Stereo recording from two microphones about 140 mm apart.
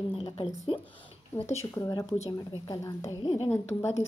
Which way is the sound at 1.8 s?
25° left (ahead or behind).